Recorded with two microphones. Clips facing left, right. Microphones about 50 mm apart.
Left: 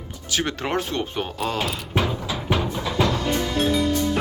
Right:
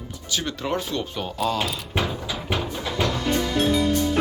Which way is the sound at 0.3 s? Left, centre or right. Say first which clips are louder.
Left 2 dB; left.